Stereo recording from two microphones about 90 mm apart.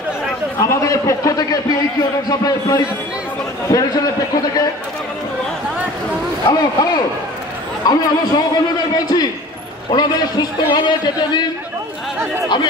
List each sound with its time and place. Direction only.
0.6 s a man's voice: 40° left (ahead or behind)
6.4 s a man's voice: 45° left (ahead or behind)